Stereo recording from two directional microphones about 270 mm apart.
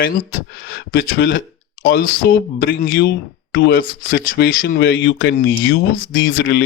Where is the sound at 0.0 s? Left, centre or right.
Left.